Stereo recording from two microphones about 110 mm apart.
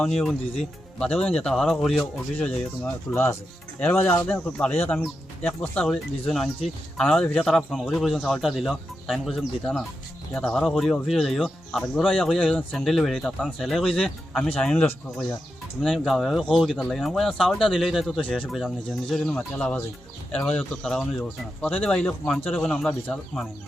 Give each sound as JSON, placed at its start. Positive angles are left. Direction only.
{"t": 0.0, "sound": "speech", "side_deg": 5}
{"t": 2.0, "sound": "speech", "side_deg": 15}
{"t": 3.1, "sound": "speech", "side_deg": 25}
{"t": 4.4, "sound": "speech", "side_deg": 10}
{"t": 19.2, "sound": "speech", "side_deg": 10}
{"t": 20.8, "sound": "speech", "side_deg": 5}